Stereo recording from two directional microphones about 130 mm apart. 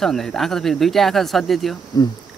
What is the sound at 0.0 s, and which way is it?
Speech, 5° left (ahead or behind).